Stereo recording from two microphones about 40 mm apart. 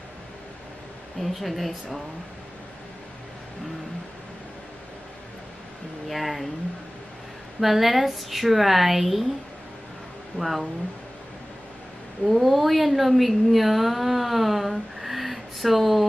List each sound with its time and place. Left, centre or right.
1.2 s a woman's voice: centre
6.0 s a woman's voice: centre
7.6 s a woman's voice: centre
10.4 s speech: left
12.3 s a woman's voice: centre